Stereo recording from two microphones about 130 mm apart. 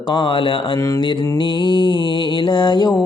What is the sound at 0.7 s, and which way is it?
Speech, 25° left (ahead or behind).